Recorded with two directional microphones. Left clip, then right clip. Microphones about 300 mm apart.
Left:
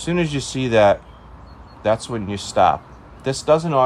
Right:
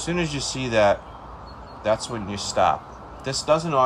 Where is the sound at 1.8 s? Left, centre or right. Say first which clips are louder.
Left 3 dB; left.